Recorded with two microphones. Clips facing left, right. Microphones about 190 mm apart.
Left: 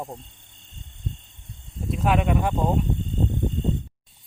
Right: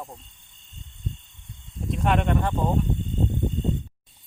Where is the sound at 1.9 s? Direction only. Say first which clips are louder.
Left 1 dB; 5° left (ahead or behind).